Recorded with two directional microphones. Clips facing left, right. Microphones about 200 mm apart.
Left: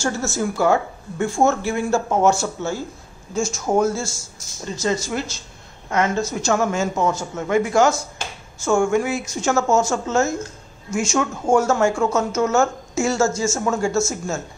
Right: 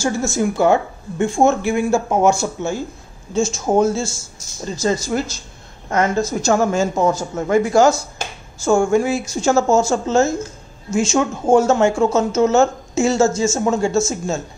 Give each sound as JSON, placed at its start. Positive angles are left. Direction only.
{"t": 0.0, "sound": "speech", "side_deg": -15}
{"t": 4.7, "sound": "a woman's voice", "side_deg": -35}